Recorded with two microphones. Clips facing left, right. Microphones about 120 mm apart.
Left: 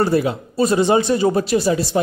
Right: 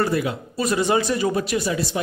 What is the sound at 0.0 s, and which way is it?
Speech, 30° left (ahead or behind).